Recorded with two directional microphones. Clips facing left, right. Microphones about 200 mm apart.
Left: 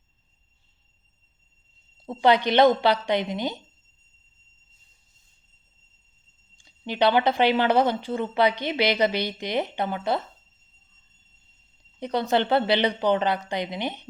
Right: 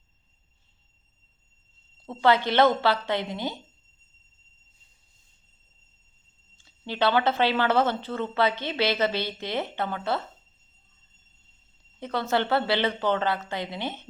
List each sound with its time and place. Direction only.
2.0 s speech: 15° left (ahead or behind)
6.6 s speech: 15° left (ahead or behind)
11.9 s speech: 15° left (ahead or behind)